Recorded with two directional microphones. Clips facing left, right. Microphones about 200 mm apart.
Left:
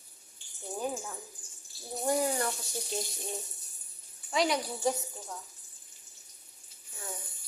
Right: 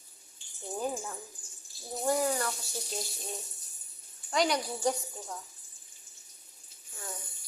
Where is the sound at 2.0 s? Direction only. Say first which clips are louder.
Even; 20° left (ahead or behind).